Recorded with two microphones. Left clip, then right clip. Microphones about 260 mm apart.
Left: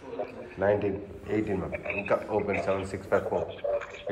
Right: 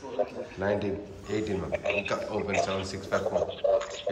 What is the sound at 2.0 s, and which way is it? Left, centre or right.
Speech, centre.